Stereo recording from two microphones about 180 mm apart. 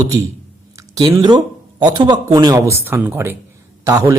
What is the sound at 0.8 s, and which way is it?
A woman's voice, 20° right (ahead or behind).